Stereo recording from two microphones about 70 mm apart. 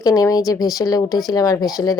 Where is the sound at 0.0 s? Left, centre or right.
Left.